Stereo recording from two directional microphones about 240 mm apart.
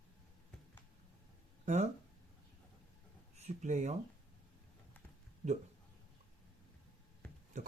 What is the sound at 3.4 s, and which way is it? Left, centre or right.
Speech, right.